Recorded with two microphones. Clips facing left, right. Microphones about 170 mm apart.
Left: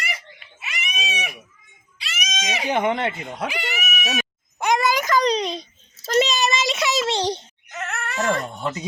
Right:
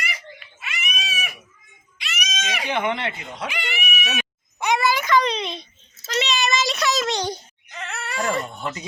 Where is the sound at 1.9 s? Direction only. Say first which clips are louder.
Left 1 dB; 30° left (ahead or behind).